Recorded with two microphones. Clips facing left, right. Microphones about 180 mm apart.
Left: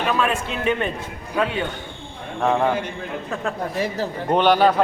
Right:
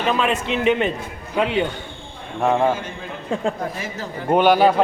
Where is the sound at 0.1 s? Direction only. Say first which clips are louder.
Right 4 dB; 20° right (ahead or behind).